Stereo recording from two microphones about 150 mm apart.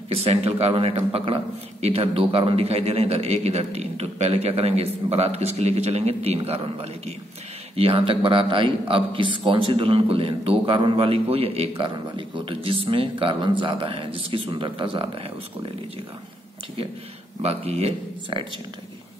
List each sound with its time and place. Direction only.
0.1 s a man's voice: 40° right (ahead or behind)
17.4 s a man's voice: 45° right (ahead or behind)